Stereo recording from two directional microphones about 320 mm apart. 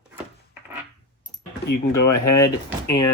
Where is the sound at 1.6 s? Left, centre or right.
Left.